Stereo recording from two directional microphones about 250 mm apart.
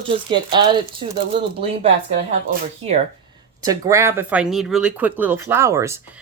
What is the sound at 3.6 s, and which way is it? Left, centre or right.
Speech, centre.